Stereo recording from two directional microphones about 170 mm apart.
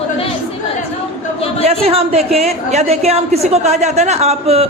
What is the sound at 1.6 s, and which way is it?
Speech, 35° right (ahead or behind).